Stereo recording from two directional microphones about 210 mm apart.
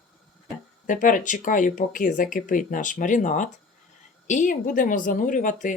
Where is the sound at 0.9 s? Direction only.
40° left (ahead or behind).